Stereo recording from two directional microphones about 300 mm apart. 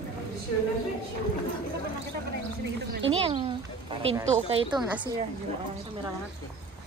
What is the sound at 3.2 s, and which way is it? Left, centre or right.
A woman's voice, centre.